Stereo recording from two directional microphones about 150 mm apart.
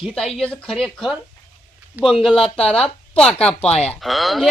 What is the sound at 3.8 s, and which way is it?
Speech, centre (ahead or behind).